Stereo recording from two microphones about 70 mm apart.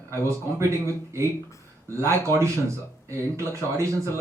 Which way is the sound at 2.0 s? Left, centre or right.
Right.